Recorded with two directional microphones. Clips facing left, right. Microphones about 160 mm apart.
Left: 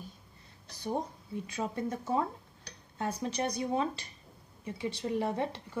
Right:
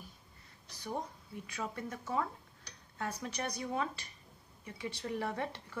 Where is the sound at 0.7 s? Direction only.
25° left (ahead or behind).